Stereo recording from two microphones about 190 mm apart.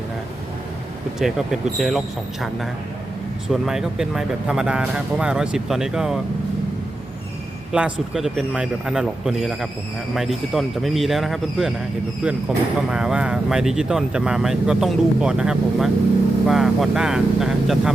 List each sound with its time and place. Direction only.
1.2 s speech: centre (ahead or behind)
7.7 s speech: 5° right (ahead or behind)